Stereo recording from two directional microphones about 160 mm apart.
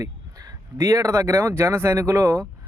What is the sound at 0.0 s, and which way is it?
Speech, 20° right (ahead or behind).